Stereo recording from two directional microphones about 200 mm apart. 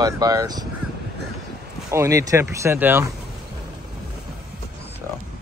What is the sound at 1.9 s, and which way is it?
Speech, 15° right (ahead or behind).